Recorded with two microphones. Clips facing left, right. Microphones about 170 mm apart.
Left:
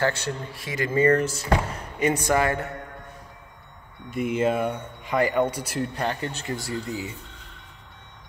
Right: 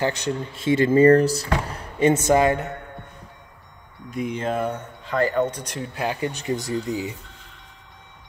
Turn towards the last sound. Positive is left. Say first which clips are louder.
# right 5 dB
turn(degrees=-20)  # may be behind; listen again after turning